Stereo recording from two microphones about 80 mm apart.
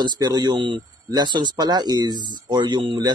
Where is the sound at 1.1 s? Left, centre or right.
Right.